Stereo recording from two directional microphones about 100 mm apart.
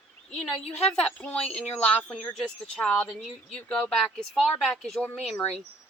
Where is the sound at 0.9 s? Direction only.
10° left (ahead or behind).